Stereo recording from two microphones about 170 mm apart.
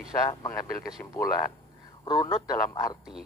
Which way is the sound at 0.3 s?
25° left (ahead or behind).